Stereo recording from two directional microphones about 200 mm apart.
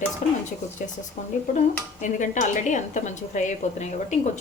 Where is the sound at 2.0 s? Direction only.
40° left (ahead or behind).